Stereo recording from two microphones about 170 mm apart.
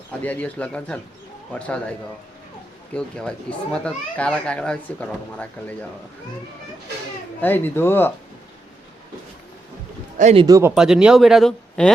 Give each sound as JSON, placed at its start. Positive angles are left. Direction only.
{"t": 0.2, "sound": "a child's voice", "side_deg": 10}
{"t": 2.9, "sound": "a child's voice", "side_deg": 5}
{"t": 7.4, "sound": "a child's voice", "side_deg": 10}
{"t": 10.3, "sound": "speech", "side_deg": -20}
{"t": 10.8, "sound": "speech", "side_deg": -5}